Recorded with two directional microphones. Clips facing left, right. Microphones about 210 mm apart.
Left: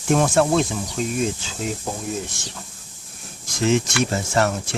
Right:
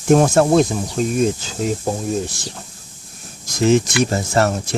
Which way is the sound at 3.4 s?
40° right (ahead or behind).